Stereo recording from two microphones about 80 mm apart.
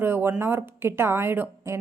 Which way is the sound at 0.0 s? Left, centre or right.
Right.